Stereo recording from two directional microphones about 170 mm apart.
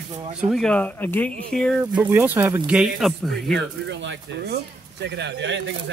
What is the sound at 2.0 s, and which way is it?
Speech, 10° right (ahead or behind).